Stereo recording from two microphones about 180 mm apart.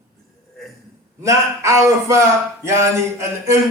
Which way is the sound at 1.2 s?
15° right (ahead or behind).